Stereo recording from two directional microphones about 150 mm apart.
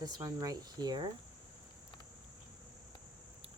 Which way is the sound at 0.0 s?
25° right (ahead or behind).